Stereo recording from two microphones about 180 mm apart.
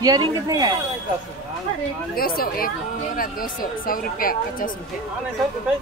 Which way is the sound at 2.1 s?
55° left (ahead or behind).